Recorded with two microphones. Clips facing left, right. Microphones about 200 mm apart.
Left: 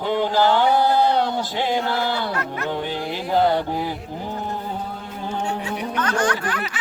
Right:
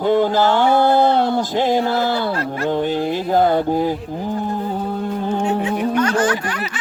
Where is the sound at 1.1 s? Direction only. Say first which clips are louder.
Right 5 dB; 45° right (ahead or behind).